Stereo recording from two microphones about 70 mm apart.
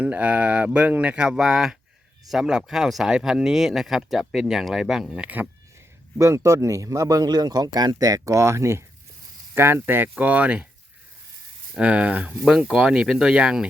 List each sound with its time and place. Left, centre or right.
0.0 s speech: centre
5.1 s speech: centre
6.1 s speech: right
9.6 s speech: right
11.7 s speech: centre